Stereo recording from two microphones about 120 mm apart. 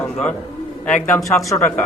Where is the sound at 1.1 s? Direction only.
25° left (ahead or behind).